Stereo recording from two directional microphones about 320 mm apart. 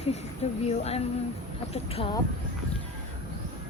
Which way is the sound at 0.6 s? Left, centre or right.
Centre.